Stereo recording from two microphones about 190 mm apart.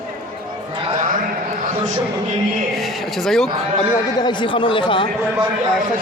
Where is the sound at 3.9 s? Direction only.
20° left (ahead or behind).